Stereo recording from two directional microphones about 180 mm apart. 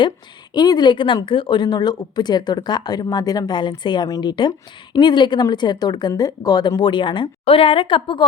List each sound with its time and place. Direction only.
0.5 s speech: 25° left (ahead or behind)